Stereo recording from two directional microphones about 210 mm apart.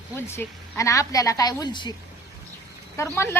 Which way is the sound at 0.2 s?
10° left (ahead or behind).